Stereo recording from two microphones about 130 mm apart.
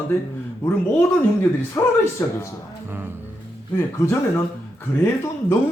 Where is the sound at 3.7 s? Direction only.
20° left (ahead or behind).